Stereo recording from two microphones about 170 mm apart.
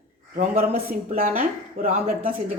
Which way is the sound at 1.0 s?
50° right (ahead or behind).